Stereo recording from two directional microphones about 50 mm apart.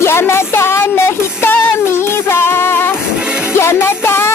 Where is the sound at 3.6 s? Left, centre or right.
Left.